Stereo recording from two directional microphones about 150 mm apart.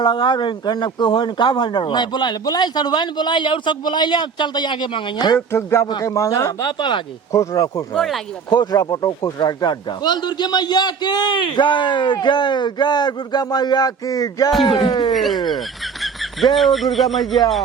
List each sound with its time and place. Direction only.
0.0 s a man's voice: 30° left (ahead or behind)
5.5 s a man's voice: 20° left (ahead or behind)
7.9 s speech: centre (ahead or behind)
8.4 s a man's voice: 25° left (ahead or behind)
15.1 s speech: centre (ahead or behind)
16.6 s speech: centre (ahead or behind)